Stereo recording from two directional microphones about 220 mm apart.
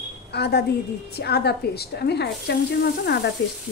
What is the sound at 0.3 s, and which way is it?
A woman's voice, 45° left (ahead or behind).